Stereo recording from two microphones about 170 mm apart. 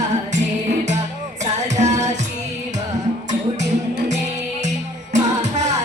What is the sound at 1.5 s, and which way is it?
Music, 45° right (ahead or behind).